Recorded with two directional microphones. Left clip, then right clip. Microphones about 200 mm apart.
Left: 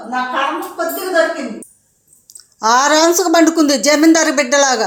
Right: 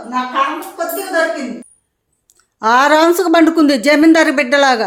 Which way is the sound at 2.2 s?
20° right (ahead or behind).